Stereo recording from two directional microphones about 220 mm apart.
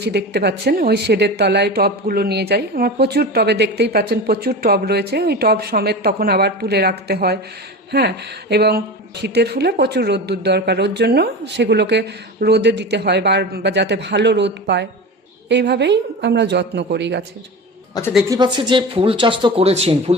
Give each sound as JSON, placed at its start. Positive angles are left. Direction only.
{"t": 0.0, "sound": "speech", "side_deg": -50}
{"t": 18.3, "sound": "speech", "side_deg": -20}